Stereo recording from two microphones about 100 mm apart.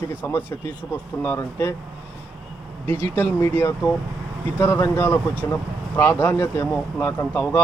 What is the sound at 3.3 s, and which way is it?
Speech, 25° left (ahead or behind).